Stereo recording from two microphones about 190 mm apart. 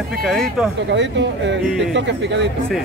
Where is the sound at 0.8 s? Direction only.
70° right (ahead or behind).